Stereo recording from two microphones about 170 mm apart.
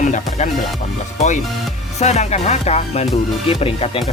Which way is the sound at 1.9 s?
40° left (ahead or behind).